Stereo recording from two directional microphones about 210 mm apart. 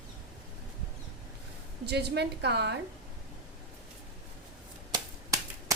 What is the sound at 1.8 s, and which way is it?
Speech, 55° right (ahead or behind).